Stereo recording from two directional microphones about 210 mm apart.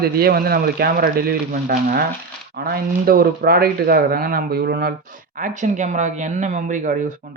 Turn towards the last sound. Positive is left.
turn(degrees=-40)  # may be behind; listen again after turning